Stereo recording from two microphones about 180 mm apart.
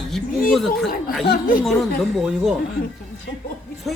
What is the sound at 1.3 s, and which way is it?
Speech, 50° left (ahead or behind).